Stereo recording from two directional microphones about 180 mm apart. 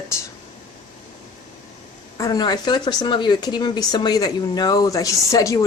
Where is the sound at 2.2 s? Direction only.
20° left (ahead or behind).